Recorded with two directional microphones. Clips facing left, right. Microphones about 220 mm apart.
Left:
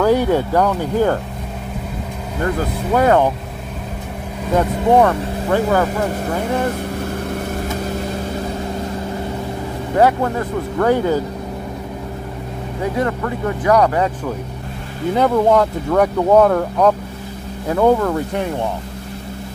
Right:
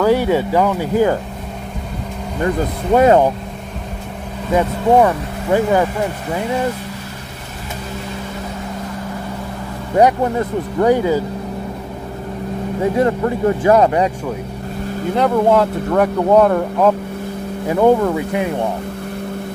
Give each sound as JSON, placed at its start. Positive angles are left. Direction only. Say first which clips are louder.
{"t": 0.0, "sound": "speech", "louder": "even", "side_deg": -5}
{"t": 2.4, "sound": "speech", "louder": "right 2 dB", "side_deg": -20}
{"t": 4.6, "sound": "speech", "louder": "even", "side_deg": -15}
{"t": 9.9, "sound": "speech", "louder": "right 2 dB", "side_deg": -20}
{"t": 12.8, "sound": "speech", "louder": "right 4 dB", "side_deg": -25}
{"t": 15.1, "sound": "speech", "louder": "even", "side_deg": 0}